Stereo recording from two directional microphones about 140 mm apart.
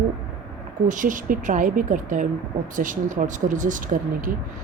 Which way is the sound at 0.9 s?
70° right (ahead or behind).